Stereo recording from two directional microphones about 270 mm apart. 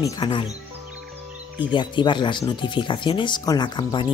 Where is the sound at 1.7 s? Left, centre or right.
Centre.